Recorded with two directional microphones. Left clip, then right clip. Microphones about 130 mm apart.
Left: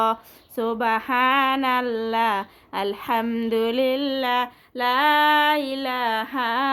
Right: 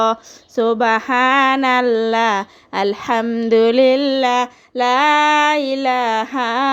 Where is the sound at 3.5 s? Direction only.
40° right (ahead or behind).